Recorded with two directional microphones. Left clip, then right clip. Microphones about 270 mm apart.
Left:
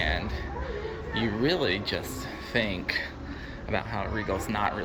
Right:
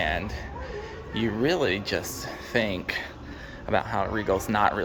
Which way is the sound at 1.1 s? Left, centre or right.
Centre.